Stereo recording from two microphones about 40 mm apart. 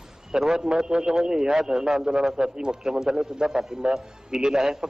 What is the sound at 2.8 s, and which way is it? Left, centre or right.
A man's voice, centre.